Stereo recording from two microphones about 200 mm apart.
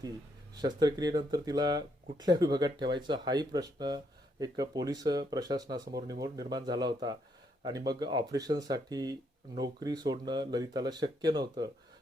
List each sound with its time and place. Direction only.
0.6 s speech: 20° right (ahead or behind)